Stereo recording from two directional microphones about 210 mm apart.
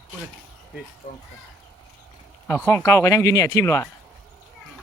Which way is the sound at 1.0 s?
45° left (ahead or behind).